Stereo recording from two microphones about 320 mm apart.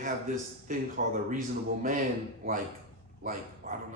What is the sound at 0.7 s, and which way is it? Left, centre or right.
Speech, right.